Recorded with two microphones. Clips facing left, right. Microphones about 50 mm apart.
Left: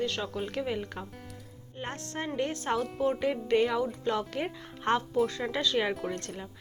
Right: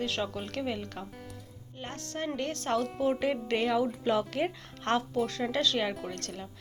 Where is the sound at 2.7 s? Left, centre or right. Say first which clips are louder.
Right 2 dB; centre.